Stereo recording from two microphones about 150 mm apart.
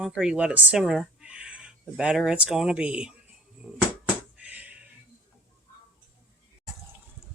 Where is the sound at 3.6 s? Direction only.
5° right (ahead or behind).